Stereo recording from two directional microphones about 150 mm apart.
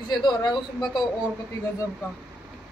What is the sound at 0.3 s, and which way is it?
Speech, 30° left (ahead or behind).